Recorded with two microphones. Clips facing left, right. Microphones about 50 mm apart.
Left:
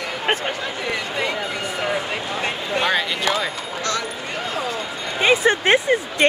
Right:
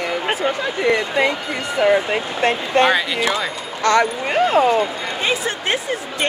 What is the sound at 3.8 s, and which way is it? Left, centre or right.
Speech, right.